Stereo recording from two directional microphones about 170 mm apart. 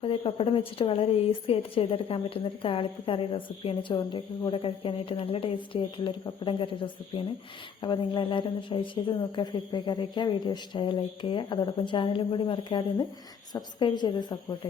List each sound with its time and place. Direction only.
0.0 s a woman's voice: 30° left (ahead or behind)